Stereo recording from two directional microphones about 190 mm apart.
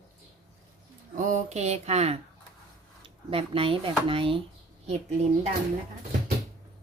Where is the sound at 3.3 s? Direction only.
30° right (ahead or behind).